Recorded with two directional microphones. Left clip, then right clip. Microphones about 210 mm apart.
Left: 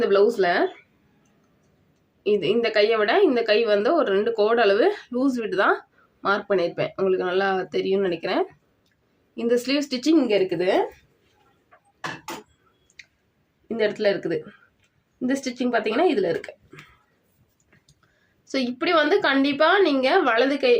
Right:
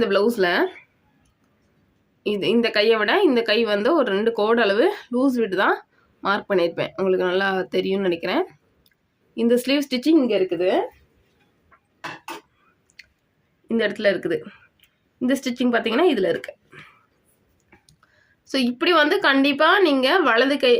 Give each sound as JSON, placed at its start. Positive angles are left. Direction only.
{"t": 0.0, "sound": "a woman's voice", "side_deg": -40}
{"t": 2.2, "sound": "a woman's voice", "side_deg": -40}
{"t": 13.7, "sound": "a woman's voice", "side_deg": -45}
{"t": 18.4, "sound": "a woman's voice", "side_deg": -40}